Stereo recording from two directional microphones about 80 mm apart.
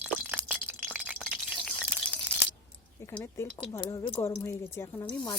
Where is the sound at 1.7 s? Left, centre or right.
Centre.